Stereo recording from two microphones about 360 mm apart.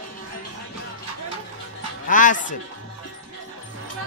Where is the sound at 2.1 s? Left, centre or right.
Left.